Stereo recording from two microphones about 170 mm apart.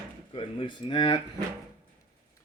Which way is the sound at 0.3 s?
30° left (ahead or behind).